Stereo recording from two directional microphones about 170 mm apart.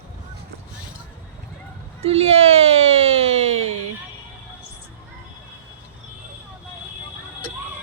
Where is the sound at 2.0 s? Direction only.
35° right (ahead or behind).